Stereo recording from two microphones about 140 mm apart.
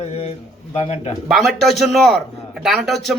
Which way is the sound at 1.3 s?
Centre (ahead or behind).